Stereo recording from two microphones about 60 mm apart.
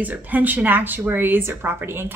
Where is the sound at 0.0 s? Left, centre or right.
Right.